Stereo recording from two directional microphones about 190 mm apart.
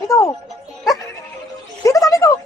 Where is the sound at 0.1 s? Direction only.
15° left (ahead or behind).